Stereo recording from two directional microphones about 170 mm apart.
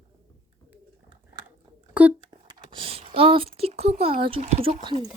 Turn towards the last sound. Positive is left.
turn(degrees=-25)  # may be behind; listen again after turning